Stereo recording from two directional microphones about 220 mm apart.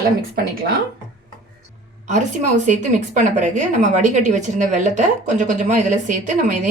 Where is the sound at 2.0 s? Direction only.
35° right (ahead or behind).